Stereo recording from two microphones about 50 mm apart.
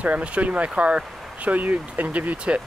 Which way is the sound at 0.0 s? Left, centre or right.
Right.